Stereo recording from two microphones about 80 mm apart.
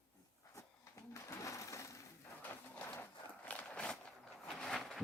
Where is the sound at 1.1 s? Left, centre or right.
Left.